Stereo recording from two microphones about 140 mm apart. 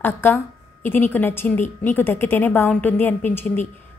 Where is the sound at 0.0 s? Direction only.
15° left (ahead or behind).